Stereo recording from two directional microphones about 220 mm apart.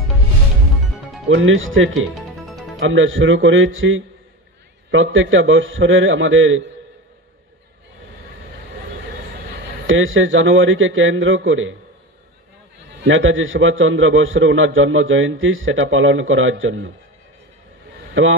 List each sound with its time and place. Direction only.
1.3 s a man's voice: 60° right (ahead or behind)
9.8 s a man's voice: 60° right (ahead or behind)
13.0 s a man's voice: 60° right (ahead or behind)
18.2 s a man's voice: 60° right (ahead or behind)